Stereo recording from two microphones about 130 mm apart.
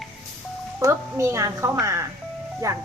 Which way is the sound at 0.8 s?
20° right (ahead or behind).